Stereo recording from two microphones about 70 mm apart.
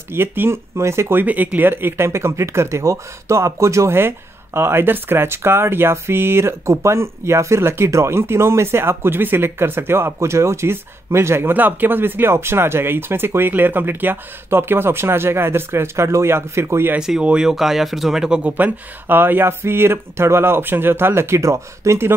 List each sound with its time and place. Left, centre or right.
0.1 s speech: right
1.2 s speech: right
17.0 s speech: centre
18.5 s speech: right